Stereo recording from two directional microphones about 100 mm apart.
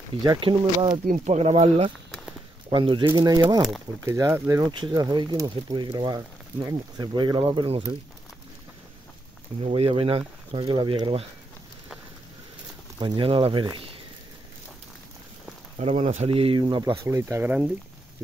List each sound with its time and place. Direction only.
0.4 s speech: 60° right (ahead or behind)
1.4 s speech: 90° right
2.7 s speech: 55° right (ahead or behind)
4.0 s speech: 30° right (ahead or behind)
4.7 s speech: 45° right (ahead or behind); by 7.8 s 60° right (ahead or behind)
9.6 s speech: 80° right; by 11.2 s 55° right (ahead or behind)
13.0 s speech: 60° right (ahead or behind)
13.7 s a sound: 65° right (ahead or behind)
15.8 s speech: 80° right
16.5 s speech: 50° right (ahead or behind)
17.0 s speech: 30° right (ahead or behind)